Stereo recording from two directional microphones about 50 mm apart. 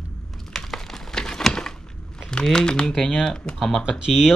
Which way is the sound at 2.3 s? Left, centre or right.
Centre.